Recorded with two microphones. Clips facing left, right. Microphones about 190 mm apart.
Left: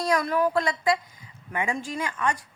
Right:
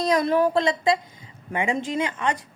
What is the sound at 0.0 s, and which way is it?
A woman's voice, 25° right (ahead or behind).